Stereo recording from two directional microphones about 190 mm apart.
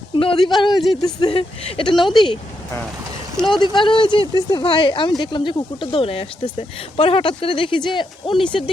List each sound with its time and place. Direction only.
0.2 s speech: 25° left (ahead or behind)
3.6 s speech: 25° left (ahead or behind)